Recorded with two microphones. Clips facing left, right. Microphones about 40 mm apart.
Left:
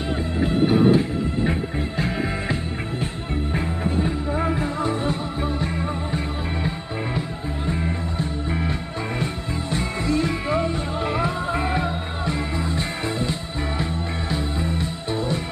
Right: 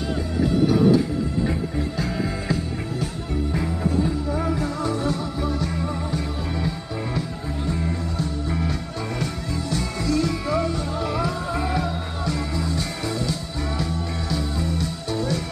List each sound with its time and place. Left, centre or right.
0.7 s music: left